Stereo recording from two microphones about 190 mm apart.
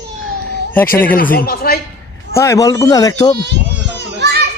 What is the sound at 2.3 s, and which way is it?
A man's voice, 15° left (ahead or behind).